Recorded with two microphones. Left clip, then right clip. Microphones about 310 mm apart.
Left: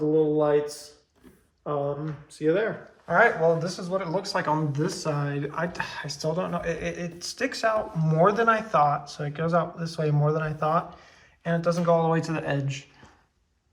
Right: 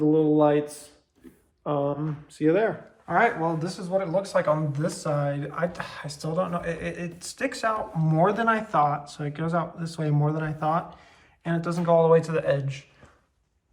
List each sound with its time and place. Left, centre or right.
0.1 s a sound: right
1.6 s speech: right
3.1 s speech: centre